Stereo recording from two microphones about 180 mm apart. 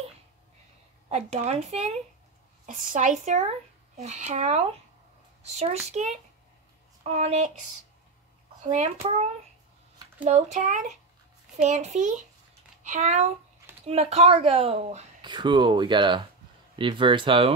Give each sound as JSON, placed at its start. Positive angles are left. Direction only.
{"t": 1.0, "sound": "a woman's voice", "side_deg": -35}
{"t": 8.6, "sound": "speech", "side_deg": -40}
{"t": 15.2, "sound": "speech", "side_deg": -25}